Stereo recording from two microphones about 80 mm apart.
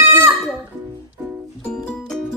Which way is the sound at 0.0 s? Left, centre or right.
Right.